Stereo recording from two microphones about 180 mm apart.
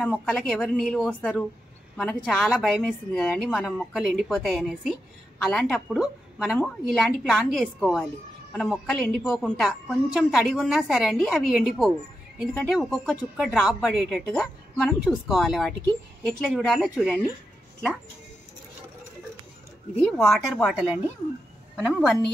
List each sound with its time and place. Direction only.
0.2 s a woman's voice: 5° left (ahead or behind)
20.0 s speech: 5° left (ahead or behind)
20.7 s a woman's voice: 5° right (ahead or behind)